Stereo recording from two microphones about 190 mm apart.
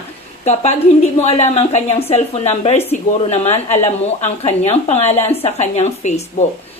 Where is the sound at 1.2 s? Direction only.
35° left (ahead or behind).